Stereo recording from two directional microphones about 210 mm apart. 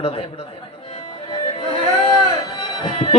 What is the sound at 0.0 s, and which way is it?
Speech, 25° left (ahead or behind).